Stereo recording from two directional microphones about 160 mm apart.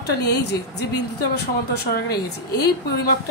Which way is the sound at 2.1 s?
25° left (ahead or behind).